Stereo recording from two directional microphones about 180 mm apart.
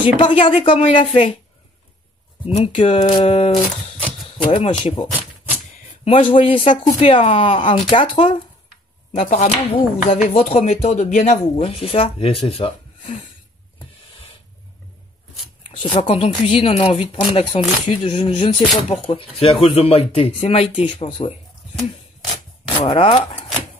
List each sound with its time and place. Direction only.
0.0 s speech: 30° left (ahead or behind)
2.5 s speech: 30° left (ahead or behind)
6.0 s speech: 30° left (ahead or behind)
9.4 s speech: 35° left (ahead or behind)
15.7 s a sound: 25° left (ahead or behind)
16.0 s speech: 30° left (ahead or behind)
22.7 s speech: 30° left (ahead or behind)